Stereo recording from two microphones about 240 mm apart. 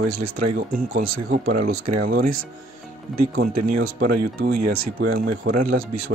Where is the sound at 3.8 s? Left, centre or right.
Right.